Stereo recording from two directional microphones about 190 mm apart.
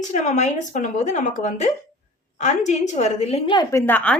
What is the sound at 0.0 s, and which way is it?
A woman's voice, 40° left (ahead or behind).